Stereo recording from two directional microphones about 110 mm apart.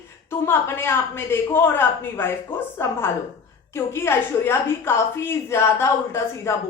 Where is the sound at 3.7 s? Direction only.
25° left (ahead or behind).